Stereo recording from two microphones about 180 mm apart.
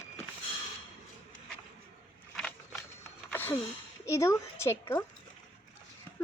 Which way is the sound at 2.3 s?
5° left (ahead or behind).